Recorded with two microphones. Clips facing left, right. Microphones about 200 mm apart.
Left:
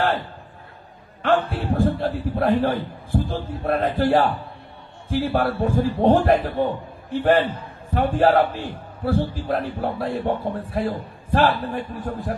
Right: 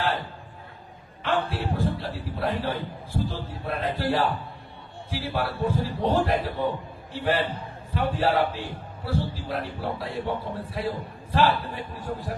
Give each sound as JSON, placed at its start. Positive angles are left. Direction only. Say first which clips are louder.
{"t": 1.5, "sound": "a man's voice", "louder": "left 6 dB", "side_deg": 55}